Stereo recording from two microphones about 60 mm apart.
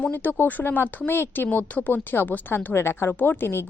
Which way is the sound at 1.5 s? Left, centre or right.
Left.